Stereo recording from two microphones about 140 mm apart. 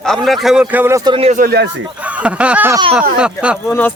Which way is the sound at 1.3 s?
85° right.